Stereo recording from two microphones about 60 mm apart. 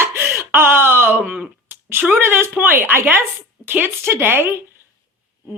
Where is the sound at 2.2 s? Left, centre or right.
Right.